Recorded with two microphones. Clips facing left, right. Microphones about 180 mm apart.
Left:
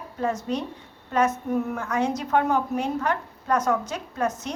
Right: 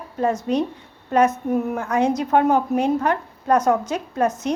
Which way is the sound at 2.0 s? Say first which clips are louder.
Right 5 dB; 20° right (ahead or behind).